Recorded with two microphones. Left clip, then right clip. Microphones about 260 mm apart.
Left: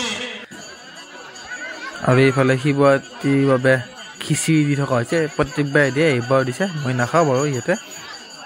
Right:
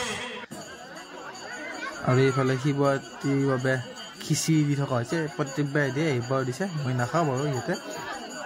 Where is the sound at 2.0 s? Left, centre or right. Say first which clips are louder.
Left 8 dB; centre.